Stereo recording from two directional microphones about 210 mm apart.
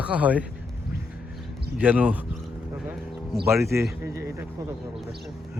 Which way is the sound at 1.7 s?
5° right (ahead or behind).